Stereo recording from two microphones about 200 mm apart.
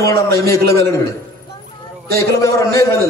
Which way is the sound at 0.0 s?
15° left (ahead or behind).